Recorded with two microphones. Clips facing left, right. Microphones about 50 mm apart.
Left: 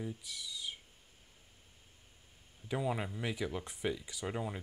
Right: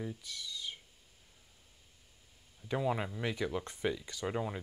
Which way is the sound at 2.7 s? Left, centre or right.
Centre.